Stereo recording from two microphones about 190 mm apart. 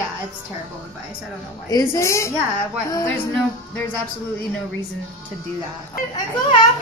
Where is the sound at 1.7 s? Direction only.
15° left (ahead or behind).